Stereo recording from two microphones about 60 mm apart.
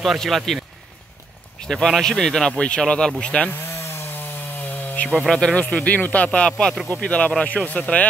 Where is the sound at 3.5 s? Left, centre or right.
Left.